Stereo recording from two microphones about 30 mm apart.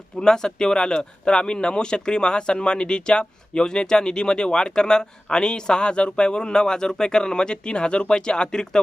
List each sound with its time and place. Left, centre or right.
0.2 s speech: left